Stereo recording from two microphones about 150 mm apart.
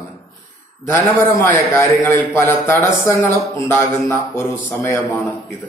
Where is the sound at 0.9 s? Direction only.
15° left (ahead or behind).